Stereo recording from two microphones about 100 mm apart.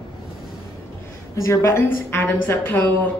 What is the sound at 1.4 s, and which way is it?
A woman's voice, 25° left (ahead or behind).